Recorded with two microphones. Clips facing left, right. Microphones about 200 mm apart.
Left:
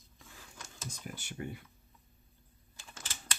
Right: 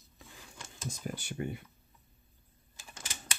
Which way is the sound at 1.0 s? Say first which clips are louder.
Right 5 dB; 30° right (ahead or behind).